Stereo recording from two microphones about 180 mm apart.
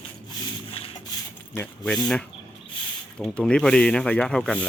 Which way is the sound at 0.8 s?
30° left (ahead or behind).